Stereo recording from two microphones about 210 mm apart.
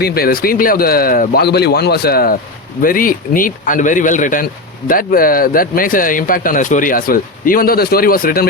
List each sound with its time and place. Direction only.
0.0 s speech: 45° left (ahead or behind)